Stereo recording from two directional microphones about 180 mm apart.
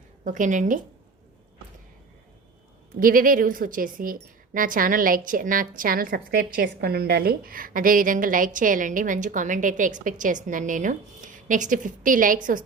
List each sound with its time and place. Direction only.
0.3 s a woman's voice: 45° right (ahead or behind)
3.0 s a woman's voice: 50° right (ahead or behind)